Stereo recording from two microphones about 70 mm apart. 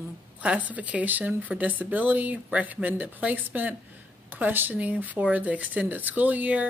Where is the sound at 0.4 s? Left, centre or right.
Centre.